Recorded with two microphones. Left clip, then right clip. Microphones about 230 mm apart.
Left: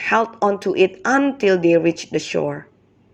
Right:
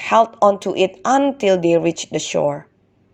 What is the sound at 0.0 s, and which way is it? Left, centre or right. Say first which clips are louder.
A woman's voice: right 4 dB; centre.